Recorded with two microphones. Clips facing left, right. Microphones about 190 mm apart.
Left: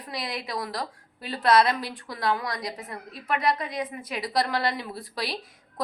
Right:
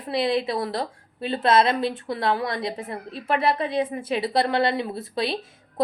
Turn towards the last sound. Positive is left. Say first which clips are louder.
# right 6 dB
turn(degrees=-25)  # may be behind; listen again after turning